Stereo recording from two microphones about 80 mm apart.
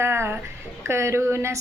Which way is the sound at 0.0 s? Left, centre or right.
Right.